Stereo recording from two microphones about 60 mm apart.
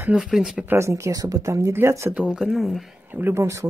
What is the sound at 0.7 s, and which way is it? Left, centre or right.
Speech, right.